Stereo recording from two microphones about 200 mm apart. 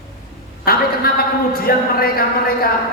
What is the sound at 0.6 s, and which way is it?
A man's voice, 50° left (ahead or behind).